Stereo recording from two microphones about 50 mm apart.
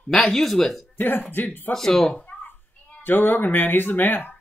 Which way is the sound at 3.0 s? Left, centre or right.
Left.